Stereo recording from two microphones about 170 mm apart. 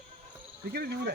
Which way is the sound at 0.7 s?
70° right (ahead or behind).